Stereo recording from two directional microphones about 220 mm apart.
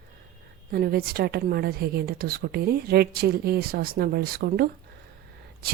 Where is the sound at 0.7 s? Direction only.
45° right (ahead or behind).